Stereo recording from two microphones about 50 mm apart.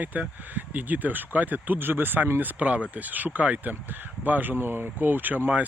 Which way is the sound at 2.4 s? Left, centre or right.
Right.